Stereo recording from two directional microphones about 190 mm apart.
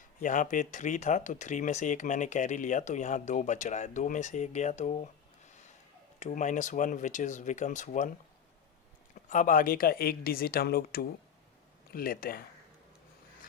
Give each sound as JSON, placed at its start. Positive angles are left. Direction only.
{"t": 0.0, "sound": "speech", "side_deg": 45}
{"t": 6.1, "sound": "speech", "side_deg": 40}
{"t": 9.3, "sound": "speech", "side_deg": 45}